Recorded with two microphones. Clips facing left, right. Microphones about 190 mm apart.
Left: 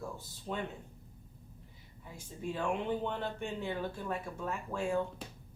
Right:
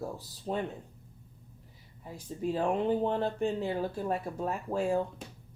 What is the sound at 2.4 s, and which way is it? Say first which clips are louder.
Speech: right 6 dB; 35° right (ahead or behind).